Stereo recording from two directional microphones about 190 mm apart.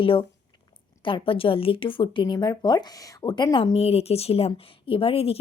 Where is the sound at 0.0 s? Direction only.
30° left (ahead or behind).